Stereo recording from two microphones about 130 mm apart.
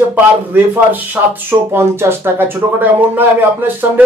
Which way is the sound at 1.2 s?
15° right (ahead or behind).